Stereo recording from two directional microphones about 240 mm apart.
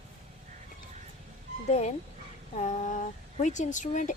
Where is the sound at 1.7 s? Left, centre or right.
Left.